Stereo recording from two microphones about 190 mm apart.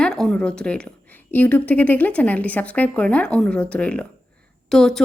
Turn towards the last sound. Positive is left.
turn(degrees=0)  # may be behind; listen again after turning